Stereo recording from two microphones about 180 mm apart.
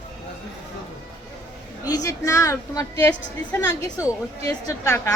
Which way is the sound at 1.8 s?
20° left (ahead or behind).